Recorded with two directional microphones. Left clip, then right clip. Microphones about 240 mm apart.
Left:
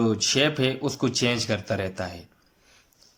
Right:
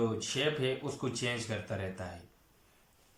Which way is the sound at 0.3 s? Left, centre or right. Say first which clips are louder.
Left 10 dB; left.